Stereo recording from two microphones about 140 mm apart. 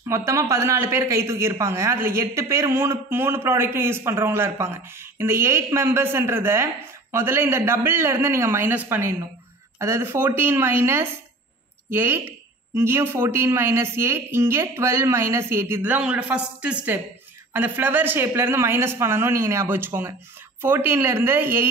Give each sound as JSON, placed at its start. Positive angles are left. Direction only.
{"t": 0.1, "sound": "a man's voice", "side_deg": -20}